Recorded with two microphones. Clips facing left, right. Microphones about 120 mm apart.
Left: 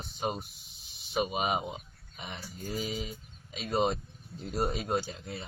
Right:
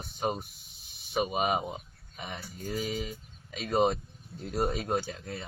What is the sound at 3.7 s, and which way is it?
Speech, 55° right (ahead or behind).